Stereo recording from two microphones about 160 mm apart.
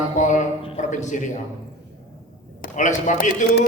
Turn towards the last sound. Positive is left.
turn(degrees=55)  # may be behind; listen again after turning